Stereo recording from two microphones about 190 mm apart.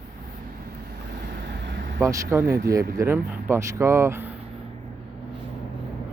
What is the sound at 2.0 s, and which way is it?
Speech, 15° right (ahead or behind).